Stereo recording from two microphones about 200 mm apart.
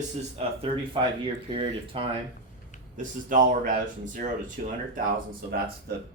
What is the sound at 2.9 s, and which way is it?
Speech, 40° right (ahead or behind).